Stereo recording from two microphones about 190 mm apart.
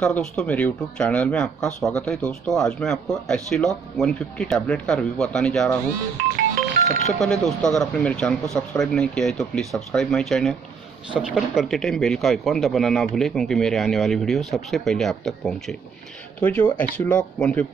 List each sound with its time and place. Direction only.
0.0 s speech: 5° left (ahead or behind)
7.1 s speech: centre (ahead or behind)